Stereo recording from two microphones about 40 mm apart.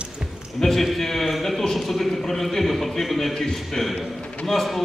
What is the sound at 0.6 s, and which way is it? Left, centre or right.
A man's voice, centre.